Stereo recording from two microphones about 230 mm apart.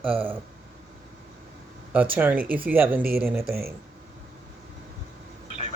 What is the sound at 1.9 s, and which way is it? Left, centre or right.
Speech, centre.